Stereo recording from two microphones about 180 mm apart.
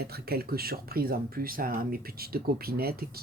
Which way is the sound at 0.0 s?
60° right (ahead or behind).